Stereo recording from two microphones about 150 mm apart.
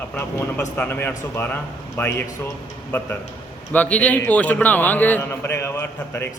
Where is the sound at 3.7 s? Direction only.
10° left (ahead or behind).